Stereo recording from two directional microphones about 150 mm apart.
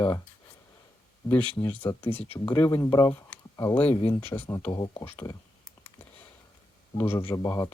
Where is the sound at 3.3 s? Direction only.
15° left (ahead or behind).